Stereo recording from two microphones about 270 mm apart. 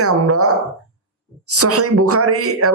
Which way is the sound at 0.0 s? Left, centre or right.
Right.